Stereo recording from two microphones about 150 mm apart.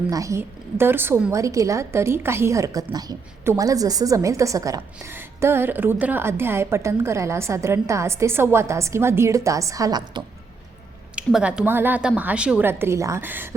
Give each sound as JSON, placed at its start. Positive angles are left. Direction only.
{"t": 0.1, "sound": "a woman's voice", "side_deg": -20}
{"t": 11.1, "sound": "a woman's voice", "side_deg": -5}